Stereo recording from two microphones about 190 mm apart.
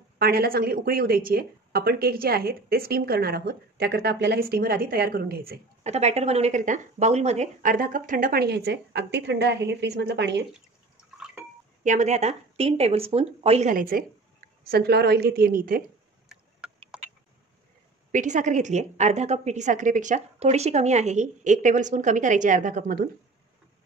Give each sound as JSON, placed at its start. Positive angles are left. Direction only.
{"t": 0.2, "sound": "speech", "side_deg": -55}
{"t": 5.9, "sound": "speech", "side_deg": -35}
{"t": 11.8, "sound": "a woman's voice", "side_deg": -40}
{"t": 16.6, "sound": "a sound", "side_deg": -5}
{"t": 18.1, "sound": "a woman's voice", "side_deg": -40}